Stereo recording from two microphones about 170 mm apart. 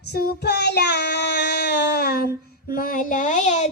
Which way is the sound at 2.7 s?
55° left (ahead or behind).